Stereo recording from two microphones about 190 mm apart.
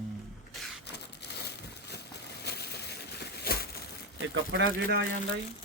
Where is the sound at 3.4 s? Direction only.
55° left (ahead or behind).